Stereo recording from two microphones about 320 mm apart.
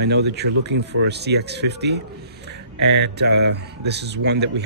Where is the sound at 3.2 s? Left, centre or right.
Right.